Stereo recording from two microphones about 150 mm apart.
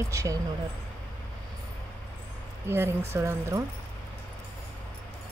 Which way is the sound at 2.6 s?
15° right (ahead or behind).